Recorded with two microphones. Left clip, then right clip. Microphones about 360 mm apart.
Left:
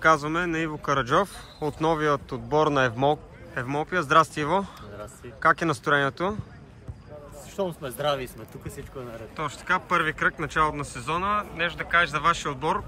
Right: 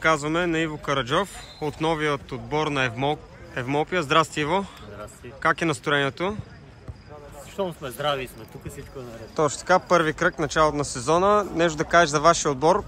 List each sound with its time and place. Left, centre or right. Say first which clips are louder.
0.0 s speech: even; centre
7.5 s speech: right 1 dB; centre
9.4 s speech: right 6 dB; centre